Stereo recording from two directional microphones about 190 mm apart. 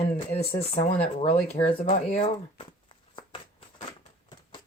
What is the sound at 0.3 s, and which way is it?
Speech, 35° left (ahead or behind).